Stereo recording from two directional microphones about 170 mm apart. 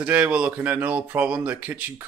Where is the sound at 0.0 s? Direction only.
5° right (ahead or behind).